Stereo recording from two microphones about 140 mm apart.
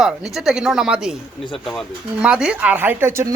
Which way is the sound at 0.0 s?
Centre (ahead or behind).